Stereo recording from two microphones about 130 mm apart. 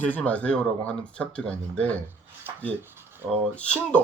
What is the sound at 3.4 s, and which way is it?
Speech, 10° left (ahead or behind).